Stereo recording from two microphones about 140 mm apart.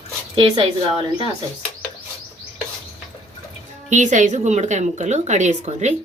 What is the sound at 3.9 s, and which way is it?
A woman's voice, 60° right (ahead or behind).